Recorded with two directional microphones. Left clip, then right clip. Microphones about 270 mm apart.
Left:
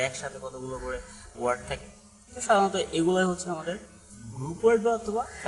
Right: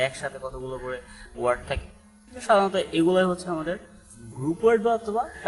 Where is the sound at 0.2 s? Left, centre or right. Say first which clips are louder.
Right 4 dB; centre.